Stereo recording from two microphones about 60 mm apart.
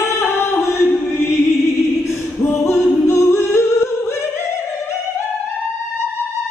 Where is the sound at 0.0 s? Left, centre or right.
Left.